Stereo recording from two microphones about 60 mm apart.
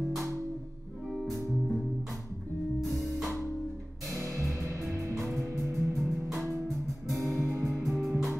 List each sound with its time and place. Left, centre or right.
1.1 s music: centre
2.8 s music: centre
4.1 s music: right
5.6 s music: centre
7.4 s music: right
7.7 s music: centre